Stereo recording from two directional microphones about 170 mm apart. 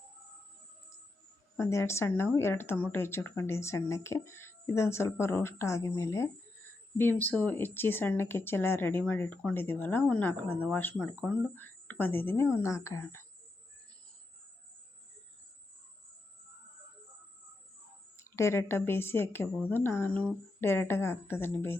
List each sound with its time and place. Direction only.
1.5 s a woman's voice: 15° left (ahead or behind)
18.2 s a woman's voice: 15° left (ahead or behind)